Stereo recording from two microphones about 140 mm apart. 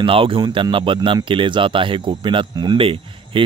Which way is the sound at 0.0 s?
40° right (ahead or behind).